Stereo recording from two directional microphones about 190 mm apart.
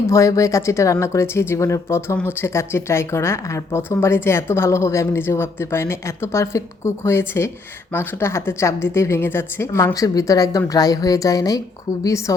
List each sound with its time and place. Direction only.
0.1 s a woman's voice: 15° left (ahead or behind)